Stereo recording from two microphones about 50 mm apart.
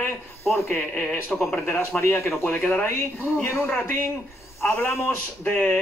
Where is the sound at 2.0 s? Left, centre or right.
Left.